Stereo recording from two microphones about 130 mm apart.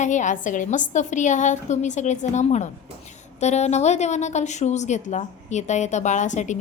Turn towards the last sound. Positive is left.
turn(degrees=70)  # may be behind; listen again after turning